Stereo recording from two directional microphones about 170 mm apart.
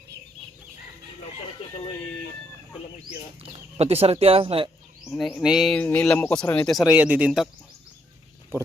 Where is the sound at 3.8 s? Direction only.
35° right (ahead or behind).